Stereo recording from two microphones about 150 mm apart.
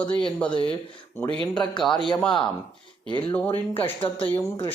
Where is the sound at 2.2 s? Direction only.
5° left (ahead or behind).